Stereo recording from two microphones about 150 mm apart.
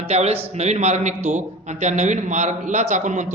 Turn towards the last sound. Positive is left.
turn(degrees=-55)  # may be behind; listen again after turning